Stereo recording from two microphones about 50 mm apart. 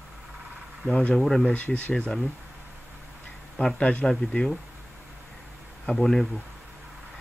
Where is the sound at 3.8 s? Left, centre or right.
Left.